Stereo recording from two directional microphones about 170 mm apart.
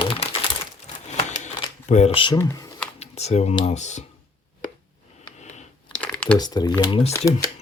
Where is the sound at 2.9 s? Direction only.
40° left (ahead or behind).